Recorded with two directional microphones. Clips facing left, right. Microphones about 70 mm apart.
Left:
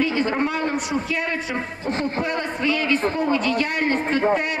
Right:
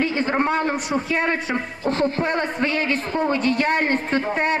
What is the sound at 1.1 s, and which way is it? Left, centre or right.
A woman's voice, right.